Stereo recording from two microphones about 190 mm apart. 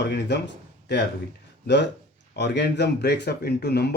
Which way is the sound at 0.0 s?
65° left (ahead or behind).